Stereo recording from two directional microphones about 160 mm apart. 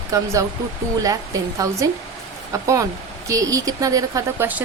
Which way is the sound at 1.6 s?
20° right (ahead or behind).